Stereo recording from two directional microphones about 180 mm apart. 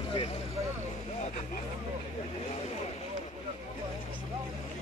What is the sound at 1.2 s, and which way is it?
Vehicle, 45° left (ahead or behind).